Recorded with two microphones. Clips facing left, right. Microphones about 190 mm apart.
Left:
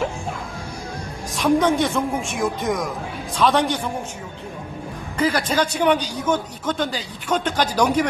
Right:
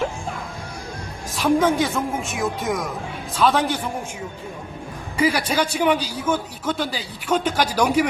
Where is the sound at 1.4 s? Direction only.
5° right (ahead or behind).